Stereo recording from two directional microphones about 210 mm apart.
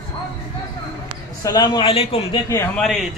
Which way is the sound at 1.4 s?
20° left (ahead or behind).